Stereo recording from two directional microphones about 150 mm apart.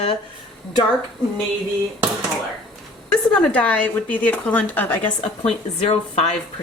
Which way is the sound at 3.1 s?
10° left (ahead or behind).